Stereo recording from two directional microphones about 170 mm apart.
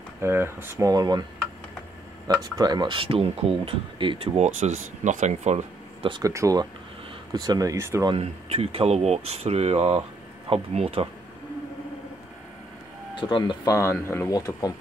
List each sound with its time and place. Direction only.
0.2 s speech: 15° right (ahead or behind)
2.4 s speech: 25° right (ahead or behind); by 5.7 s 45° right (ahead or behind)
6.0 s speech: 30° right (ahead or behind)
8.1 s speech: 35° right (ahead or behind)
13.1 s speech: 30° left (ahead or behind)